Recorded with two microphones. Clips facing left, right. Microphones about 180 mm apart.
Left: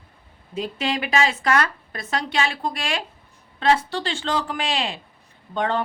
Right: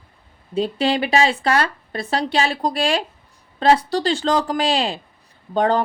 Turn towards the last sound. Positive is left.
turn(degrees=-35)  # may be behind; listen again after turning